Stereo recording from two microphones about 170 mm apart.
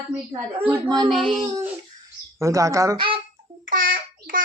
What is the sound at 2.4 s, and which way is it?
Speech, 20° right (ahead or behind).